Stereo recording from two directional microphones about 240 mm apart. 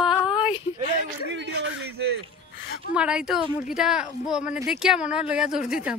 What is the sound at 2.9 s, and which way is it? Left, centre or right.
Speech, centre.